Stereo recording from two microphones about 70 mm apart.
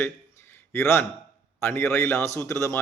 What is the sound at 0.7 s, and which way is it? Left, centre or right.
Speech, left.